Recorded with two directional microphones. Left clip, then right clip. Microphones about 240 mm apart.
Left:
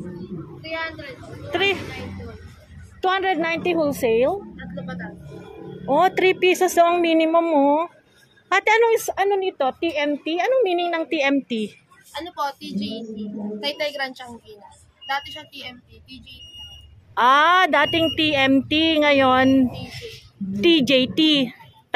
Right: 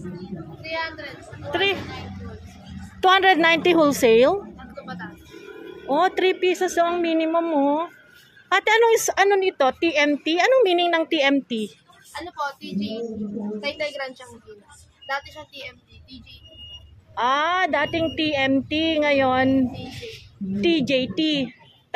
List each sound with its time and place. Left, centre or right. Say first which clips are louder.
0.7 s a sound: even; right
1.5 s speech: left 1 dB; centre
3.0 s a woman's voice: right 5 dB; centre
5.9 s a woman's voice: left 2 dB; centre
20.6 s speech: left 4 dB; centre